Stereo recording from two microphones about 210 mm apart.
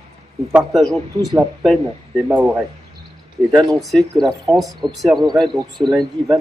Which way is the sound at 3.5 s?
Centre (ahead or behind).